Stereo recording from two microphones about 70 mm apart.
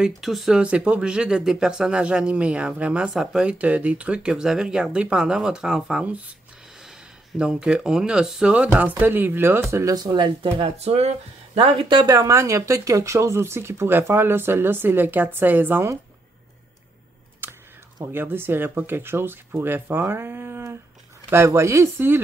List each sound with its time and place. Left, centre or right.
0.0 s speech: centre
0.6 s speech: centre
3.5 s speech: right
8.5 s speech: right
9.9 s speech: right
12.1 s speech: right
17.4 s computer keyboard: right
18.0 s speech: right